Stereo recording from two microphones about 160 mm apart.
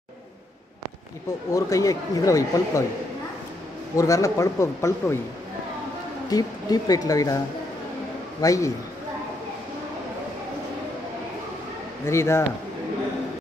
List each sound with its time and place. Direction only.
1.5 s speech: 20° left (ahead or behind)
3.9 s speech: 20° left (ahead or behind)
6.3 s speech: 25° left (ahead or behind)
12.1 s a man's voice: 15° left (ahead or behind)